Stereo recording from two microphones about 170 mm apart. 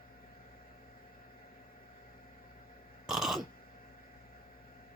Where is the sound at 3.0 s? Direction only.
Centre (ahead or behind).